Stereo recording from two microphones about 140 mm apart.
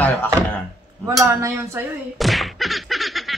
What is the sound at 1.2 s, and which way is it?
Speech, 20° right (ahead or behind).